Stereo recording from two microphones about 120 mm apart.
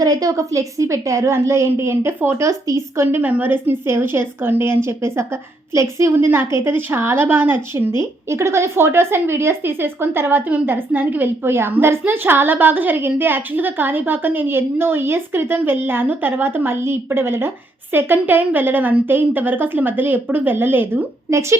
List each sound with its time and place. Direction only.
0.0 s speech: 30° right (ahead or behind)